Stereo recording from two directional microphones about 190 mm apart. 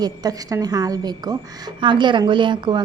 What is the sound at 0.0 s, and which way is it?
A woman's voice, 20° right (ahead or behind).